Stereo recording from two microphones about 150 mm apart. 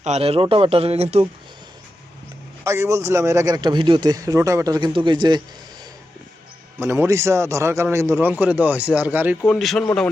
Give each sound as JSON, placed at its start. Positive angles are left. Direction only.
{"t": 0.0, "sound": "speech", "side_deg": -45}
{"t": 2.6, "sound": "a man's voice", "side_deg": -20}
{"t": 6.7, "sound": "a man's voice", "side_deg": -15}
{"t": 9.5, "sound": "a man's voice", "side_deg": 0}